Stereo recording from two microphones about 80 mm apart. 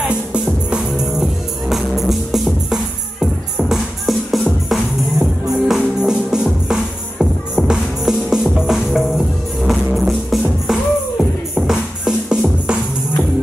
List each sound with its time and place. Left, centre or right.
0.1 s music: centre